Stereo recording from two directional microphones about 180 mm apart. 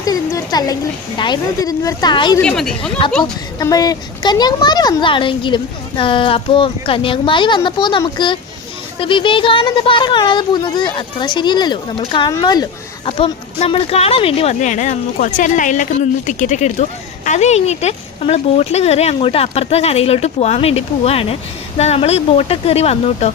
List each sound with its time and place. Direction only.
0.0 s a woman's voice: 20° left (ahead or behind)
2.4 s speech: 5° left (ahead or behind)
3.6 s speech: 20° left (ahead or behind); by 23.3 s 35° left (ahead or behind)